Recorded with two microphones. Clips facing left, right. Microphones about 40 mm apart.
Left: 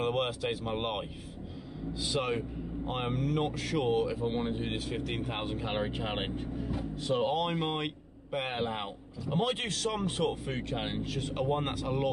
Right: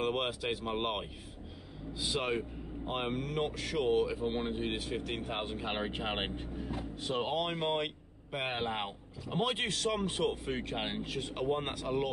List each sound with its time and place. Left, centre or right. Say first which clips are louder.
0.0 s speech: left 2 dB; centre
2.0 s speech: left 1 dB; centre
11.3 s speech: left 3 dB; centre